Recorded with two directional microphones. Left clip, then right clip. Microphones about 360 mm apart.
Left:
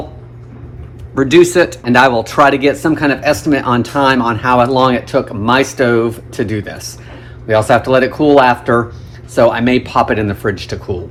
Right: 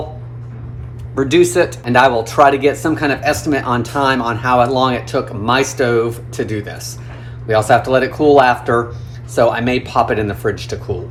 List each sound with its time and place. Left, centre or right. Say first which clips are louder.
1.1 s speech: left 4 dB; left